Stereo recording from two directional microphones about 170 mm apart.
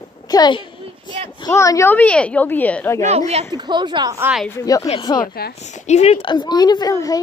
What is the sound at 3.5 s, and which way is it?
Speech, 25° right (ahead or behind).